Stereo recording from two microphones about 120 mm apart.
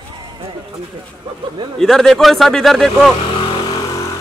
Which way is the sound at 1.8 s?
Centre (ahead or behind).